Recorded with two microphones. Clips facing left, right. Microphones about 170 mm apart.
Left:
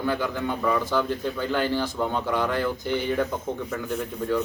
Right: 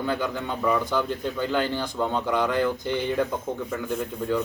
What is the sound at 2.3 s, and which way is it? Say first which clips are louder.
A man's voice: right 4 dB; 15° right (ahead or behind).